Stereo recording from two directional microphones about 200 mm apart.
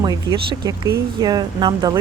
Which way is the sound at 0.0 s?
20° right (ahead or behind).